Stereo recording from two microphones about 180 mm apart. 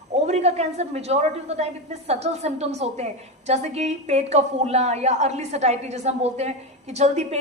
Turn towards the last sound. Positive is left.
turn(degrees=-40)  # may be behind; listen again after turning